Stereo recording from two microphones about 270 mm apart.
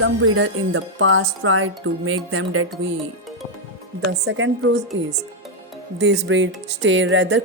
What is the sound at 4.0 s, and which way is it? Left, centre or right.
Speech, right.